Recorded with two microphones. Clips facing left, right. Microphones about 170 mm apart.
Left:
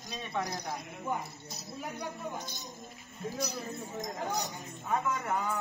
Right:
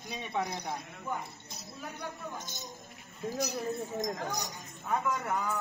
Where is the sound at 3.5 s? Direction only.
40° right (ahead or behind).